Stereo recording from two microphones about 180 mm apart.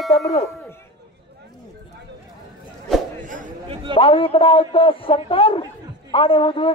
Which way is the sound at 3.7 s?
30° right (ahead or behind).